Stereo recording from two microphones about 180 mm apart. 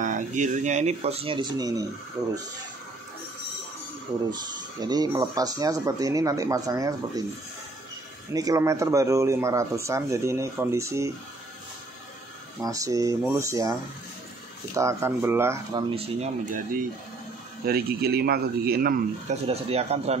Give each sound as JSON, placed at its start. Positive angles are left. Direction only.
{"t": 0.0, "sound": "speech", "side_deg": -45}
{"t": 4.3, "sound": "speech", "side_deg": -20}
{"t": 8.3, "sound": "speech", "side_deg": -20}
{"t": 12.6, "sound": "speech", "side_deg": -20}
{"t": 15.9, "sound": "speech", "side_deg": -35}
{"t": 17.6, "sound": "speech", "side_deg": -60}
{"t": 19.4, "sound": "speech", "side_deg": -35}